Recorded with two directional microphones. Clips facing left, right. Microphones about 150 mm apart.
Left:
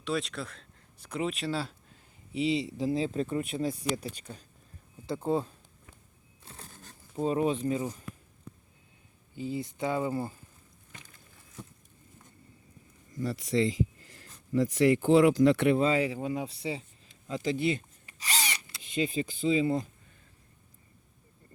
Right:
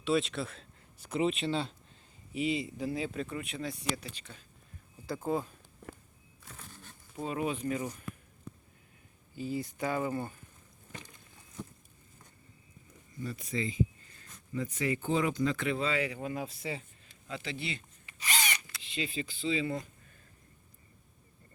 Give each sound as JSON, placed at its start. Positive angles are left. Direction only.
{"t": 0.0, "sound": "speech", "side_deg": 0}
{"t": 2.3, "sound": "speech", "side_deg": 90}
{"t": 2.6, "sound": "speech", "side_deg": 30}
{"t": 5.0, "sound": "speech", "side_deg": 25}
{"t": 5.8, "sound": "walk", "side_deg": -90}
{"t": 6.4, "sound": "a sound", "side_deg": 30}
{"t": 9.3, "sound": "speech", "side_deg": 20}
{"t": 13.2, "sound": "speech", "side_deg": 85}
{"t": 16.1, "sound": "a sound", "side_deg": 20}
{"t": 18.8, "sound": "speech", "side_deg": 45}